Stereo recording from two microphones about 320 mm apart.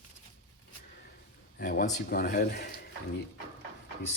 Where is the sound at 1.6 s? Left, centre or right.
Left.